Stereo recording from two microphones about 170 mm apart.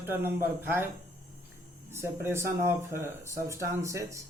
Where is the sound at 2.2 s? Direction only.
15° right (ahead or behind).